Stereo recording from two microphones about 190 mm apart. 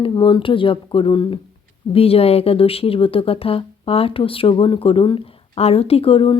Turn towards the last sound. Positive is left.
turn(degrees=30)  # may be behind; listen again after turning